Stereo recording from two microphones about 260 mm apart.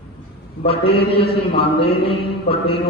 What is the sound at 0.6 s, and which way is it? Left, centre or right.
Speech, left.